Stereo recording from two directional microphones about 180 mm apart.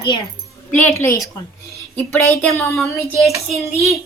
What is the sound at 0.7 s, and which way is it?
Speech, 10° left (ahead or behind).